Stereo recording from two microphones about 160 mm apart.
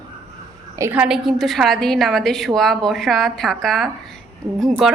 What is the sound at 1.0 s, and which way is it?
A woman's voice, centre (ahead or behind).